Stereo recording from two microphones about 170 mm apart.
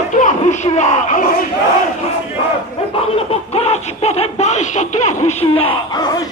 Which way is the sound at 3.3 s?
35° left (ahead or behind).